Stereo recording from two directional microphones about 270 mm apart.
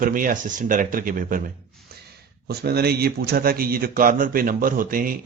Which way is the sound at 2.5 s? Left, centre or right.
Right.